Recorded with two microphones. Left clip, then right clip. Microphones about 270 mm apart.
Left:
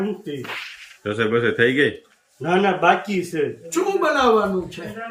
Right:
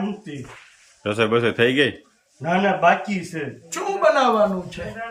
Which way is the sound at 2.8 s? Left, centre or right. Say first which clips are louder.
Even; centre.